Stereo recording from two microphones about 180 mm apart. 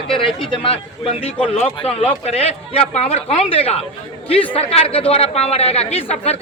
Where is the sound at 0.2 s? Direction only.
30° left (ahead or behind).